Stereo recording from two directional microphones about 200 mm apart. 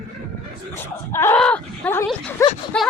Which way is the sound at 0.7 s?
10° left (ahead or behind).